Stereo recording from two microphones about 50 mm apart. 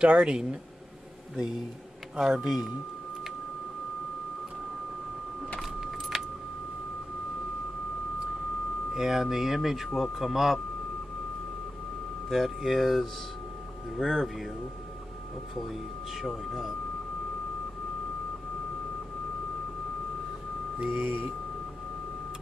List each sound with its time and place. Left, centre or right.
0.0 s speech: centre
5.6 s keys jangling: centre
8.9 s speech: centre
12.3 s speech: centre
15.5 s speech: centre
20.9 s speech: right